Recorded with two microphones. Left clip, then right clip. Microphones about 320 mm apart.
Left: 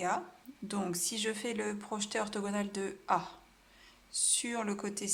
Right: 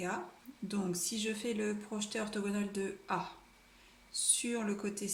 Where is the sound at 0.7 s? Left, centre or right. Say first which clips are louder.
Left 2 dB; left.